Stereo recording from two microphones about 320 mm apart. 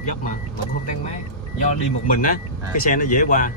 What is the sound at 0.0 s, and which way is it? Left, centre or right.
Speech, left.